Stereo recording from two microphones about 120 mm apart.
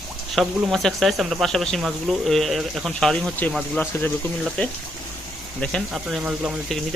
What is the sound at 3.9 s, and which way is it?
Speech, 20° left (ahead or behind).